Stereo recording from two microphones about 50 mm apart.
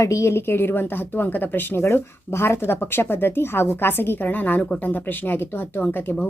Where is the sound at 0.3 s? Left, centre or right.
Left.